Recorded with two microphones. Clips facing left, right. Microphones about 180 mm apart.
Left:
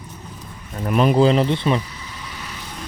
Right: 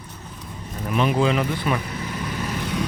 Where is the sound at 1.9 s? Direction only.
55° right (ahead or behind).